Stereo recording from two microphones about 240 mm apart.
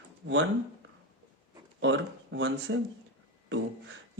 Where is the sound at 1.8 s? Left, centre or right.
Right.